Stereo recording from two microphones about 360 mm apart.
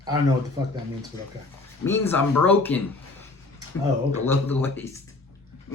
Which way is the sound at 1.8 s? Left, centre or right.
Centre.